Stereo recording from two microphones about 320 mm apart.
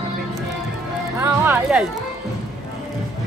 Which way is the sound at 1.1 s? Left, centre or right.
Centre.